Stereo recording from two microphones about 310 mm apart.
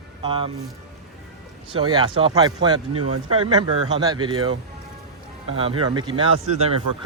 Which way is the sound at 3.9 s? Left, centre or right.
Centre.